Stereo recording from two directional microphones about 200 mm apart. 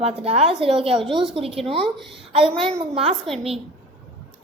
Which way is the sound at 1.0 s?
Centre (ahead or behind).